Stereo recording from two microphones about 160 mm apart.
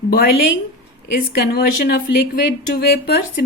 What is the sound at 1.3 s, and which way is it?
Speech, 75° left (ahead or behind).